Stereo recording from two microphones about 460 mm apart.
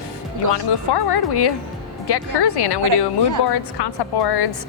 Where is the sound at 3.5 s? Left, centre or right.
Left.